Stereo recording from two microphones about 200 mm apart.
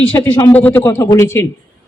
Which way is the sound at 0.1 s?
15° left (ahead or behind).